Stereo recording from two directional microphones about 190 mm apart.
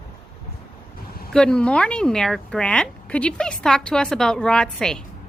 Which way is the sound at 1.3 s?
5° left (ahead or behind).